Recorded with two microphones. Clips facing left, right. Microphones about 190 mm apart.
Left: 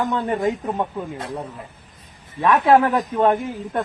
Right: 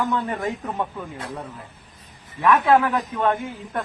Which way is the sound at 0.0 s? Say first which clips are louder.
Left 3 dB; 25° left (ahead or behind).